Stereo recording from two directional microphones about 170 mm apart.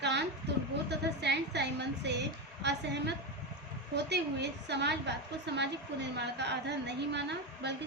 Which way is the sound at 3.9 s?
80° right.